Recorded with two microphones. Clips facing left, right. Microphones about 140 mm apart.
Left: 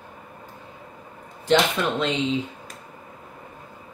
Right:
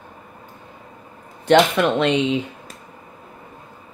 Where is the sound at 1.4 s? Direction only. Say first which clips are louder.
Right 6 dB; 65° right (ahead or behind).